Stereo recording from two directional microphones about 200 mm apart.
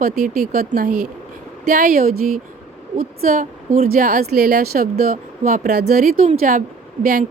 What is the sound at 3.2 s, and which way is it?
A woman's voice, 45° right (ahead or behind).